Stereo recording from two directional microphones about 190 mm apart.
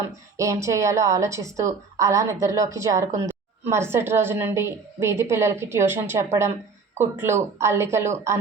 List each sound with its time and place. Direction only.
0.3 s a woman's voice: 15° right (ahead or behind)